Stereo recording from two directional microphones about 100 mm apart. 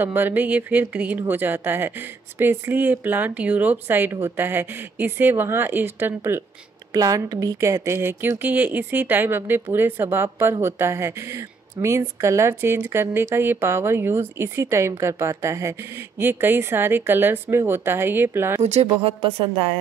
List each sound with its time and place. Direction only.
0.0 s speech: 20° right (ahead or behind)
6.9 s speech: 35° right (ahead or behind)
18.6 s speech: 85° right